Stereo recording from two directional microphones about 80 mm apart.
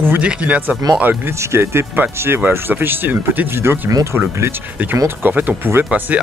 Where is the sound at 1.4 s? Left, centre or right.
Right.